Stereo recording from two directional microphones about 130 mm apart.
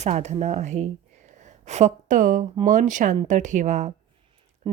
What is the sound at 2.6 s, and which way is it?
A woman's voice, 75° right (ahead or behind).